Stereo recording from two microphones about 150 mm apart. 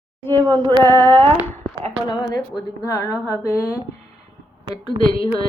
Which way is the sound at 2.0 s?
30° left (ahead or behind).